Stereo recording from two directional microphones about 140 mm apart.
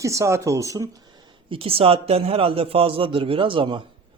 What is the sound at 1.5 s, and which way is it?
A man's voice, 40° right (ahead or behind).